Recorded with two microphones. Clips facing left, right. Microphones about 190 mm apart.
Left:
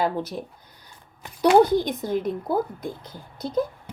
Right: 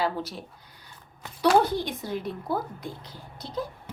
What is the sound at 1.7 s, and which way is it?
A woman's voice, 45° left (ahead or behind).